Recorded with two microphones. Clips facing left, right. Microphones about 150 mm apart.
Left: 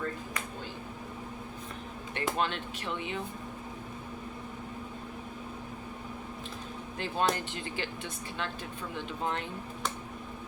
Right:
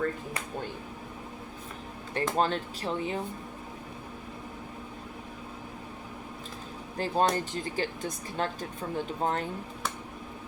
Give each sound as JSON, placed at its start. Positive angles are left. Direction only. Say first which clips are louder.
{"t": 2.1, "sound": "speech", "louder": "right 4 dB", "side_deg": -35}
{"t": 7.0, "sound": "speech", "louder": "right 4 dB", "side_deg": -40}